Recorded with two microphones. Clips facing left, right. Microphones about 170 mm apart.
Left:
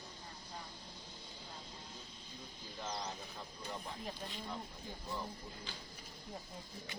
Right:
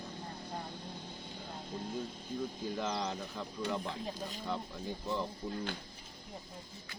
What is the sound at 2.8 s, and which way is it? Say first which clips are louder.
Speech: right 5 dB; 85° right.